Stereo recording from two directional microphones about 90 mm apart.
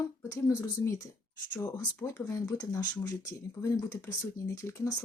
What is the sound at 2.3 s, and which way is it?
Speech, 40° left (ahead or behind).